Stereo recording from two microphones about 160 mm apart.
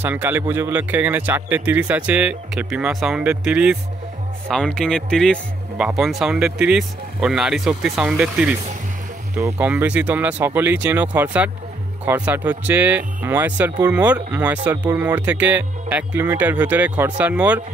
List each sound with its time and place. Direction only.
0.0 s speech: 10° right (ahead or behind)